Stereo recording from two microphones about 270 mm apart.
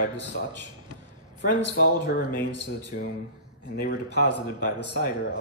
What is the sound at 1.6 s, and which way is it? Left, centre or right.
Speech, left.